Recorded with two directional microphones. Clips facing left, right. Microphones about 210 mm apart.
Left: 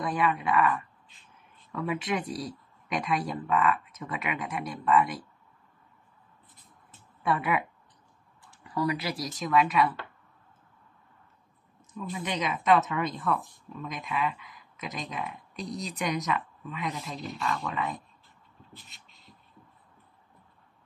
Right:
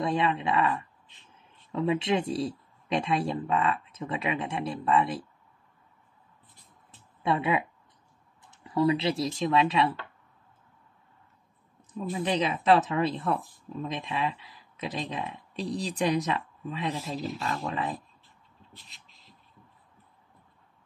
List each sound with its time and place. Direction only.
0.0 s a man's voice: 25° right (ahead or behind)
7.2 s speech: 25° right (ahead or behind)
11.9 s speech: 30° right (ahead or behind)
18.9 s a sound: centre (ahead or behind)